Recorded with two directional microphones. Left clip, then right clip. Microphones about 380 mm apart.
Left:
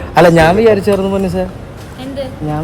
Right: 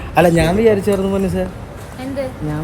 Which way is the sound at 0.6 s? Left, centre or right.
Centre.